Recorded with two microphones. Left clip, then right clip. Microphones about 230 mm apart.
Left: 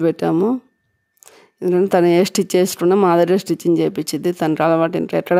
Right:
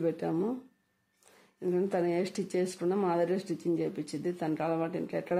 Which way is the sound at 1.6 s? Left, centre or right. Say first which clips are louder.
Left 15 dB; left.